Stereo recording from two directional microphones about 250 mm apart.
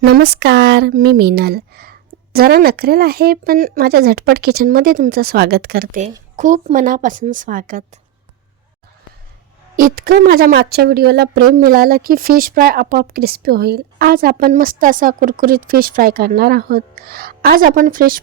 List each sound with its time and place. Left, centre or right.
0.0 s speech: right
9.7 s speech: right